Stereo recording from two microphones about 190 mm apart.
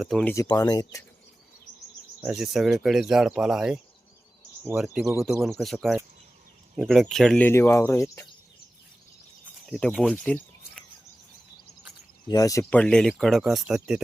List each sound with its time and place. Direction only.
0.0 s speech: centre (ahead or behind)
0.3 s speech: 20° left (ahead or behind)
2.2 s speech: centre (ahead or behind)
5.4 s speech: centre (ahead or behind)
9.6 s speech: centre (ahead or behind)
12.3 s speech: 20° left (ahead or behind); by 14.0 s 5° right (ahead or behind)